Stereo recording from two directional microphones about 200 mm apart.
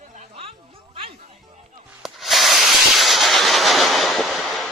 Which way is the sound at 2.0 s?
Centre (ahead or behind).